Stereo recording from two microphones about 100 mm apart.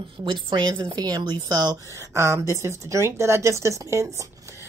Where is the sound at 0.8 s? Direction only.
40° right (ahead or behind).